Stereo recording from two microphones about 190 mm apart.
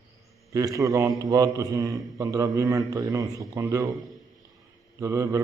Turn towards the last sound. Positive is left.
turn(degrees=-15)  # may be behind; listen again after turning